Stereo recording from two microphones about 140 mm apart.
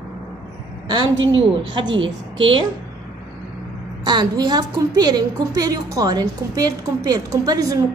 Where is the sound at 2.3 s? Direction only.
40° right (ahead or behind).